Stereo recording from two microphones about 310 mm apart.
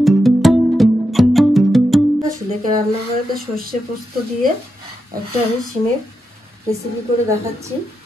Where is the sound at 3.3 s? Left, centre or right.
Right.